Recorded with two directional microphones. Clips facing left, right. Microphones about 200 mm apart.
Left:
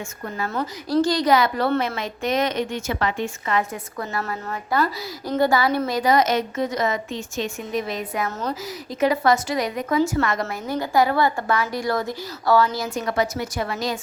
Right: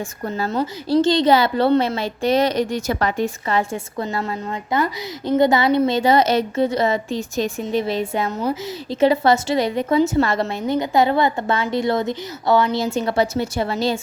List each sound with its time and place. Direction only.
0.5 s a woman's voice: 25° right (ahead or behind)